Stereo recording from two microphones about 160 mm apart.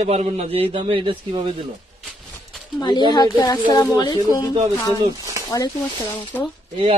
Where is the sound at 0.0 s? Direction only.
40° right (ahead or behind).